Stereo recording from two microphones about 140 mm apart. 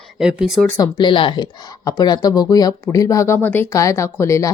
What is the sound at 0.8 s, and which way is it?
A woman's voice, 35° left (ahead or behind).